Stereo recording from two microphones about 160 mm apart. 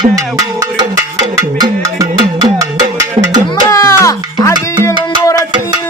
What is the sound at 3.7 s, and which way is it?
Music, 20° left (ahead or behind).